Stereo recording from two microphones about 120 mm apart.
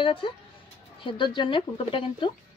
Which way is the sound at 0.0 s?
45° left (ahead or behind).